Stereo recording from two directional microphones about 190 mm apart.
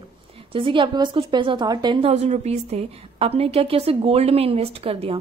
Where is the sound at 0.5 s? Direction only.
25° right (ahead or behind).